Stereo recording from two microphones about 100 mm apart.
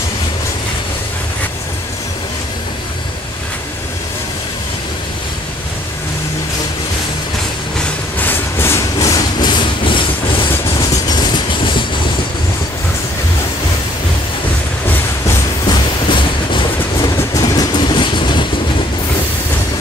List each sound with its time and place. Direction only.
8.2 s train: 20° left (ahead or behind)
8.9 s train: 40° left (ahead or behind); by 10.0 s 55° left (ahead or behind)
10.8 s train: 40° left (ahead or behind)
15.6 s train: 50° left (ahead or behind)
17.3 s vehicle: 35° left (ahead or behind)
17.7 s train: 50° left (ahead or behind)